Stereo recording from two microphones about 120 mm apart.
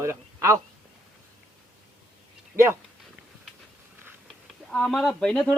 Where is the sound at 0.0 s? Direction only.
25° right (ahead or behind).